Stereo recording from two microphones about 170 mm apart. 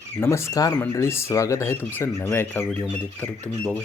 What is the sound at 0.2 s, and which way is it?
Speech, 15° left (ahead or behind).